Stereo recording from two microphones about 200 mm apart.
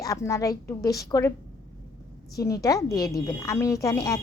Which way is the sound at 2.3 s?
15° left (ahead or behind).